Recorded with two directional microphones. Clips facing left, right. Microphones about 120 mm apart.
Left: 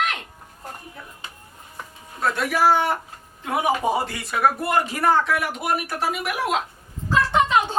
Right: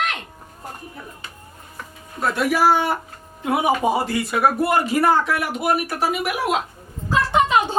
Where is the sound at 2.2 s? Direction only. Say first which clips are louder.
Right 2 dB; 5° right (ahead or behind).